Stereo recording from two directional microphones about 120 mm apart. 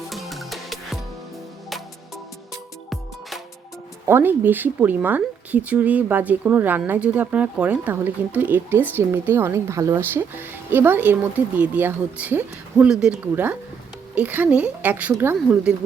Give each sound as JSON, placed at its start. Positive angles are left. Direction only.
{"t": 0.1, "sound": "music", "side_deg": 0}
{"t": 2.9, "sound": "music", "side_deg": 0}
{"t": 4.0, "sound": "speech", "side_deg": -20}